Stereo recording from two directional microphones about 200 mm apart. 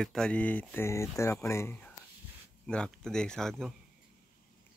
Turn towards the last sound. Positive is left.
turn(degrees=0)  # may be behind; listen again after turning